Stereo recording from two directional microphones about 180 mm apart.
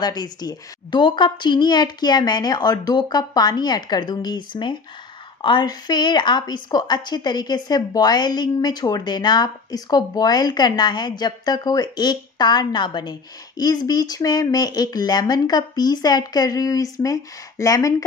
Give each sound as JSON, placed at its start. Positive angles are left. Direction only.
{"t": 0.0, "sound": "a woman's voice", "side_deg": 20}